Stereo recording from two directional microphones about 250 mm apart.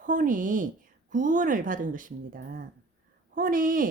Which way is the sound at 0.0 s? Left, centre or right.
Right.